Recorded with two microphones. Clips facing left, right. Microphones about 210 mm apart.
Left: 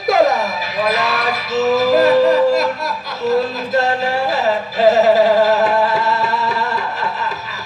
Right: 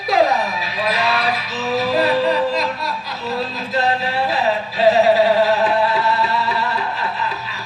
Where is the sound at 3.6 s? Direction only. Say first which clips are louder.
Left 3 dB; 45° left (ahead or behind).